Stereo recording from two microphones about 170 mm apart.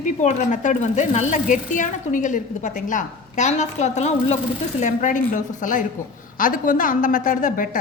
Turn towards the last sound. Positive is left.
turn(degrees=50)  # may be behind; listen again after turning